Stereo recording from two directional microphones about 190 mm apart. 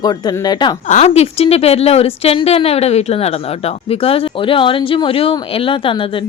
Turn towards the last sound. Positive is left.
turn(degrees=25)  # may be behind; listen again after turning